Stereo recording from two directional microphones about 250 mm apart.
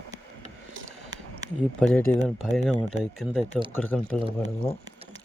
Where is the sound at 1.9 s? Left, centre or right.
Centre.